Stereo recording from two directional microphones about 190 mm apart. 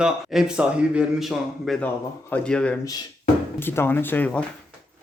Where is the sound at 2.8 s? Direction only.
20° left (ahead or behind).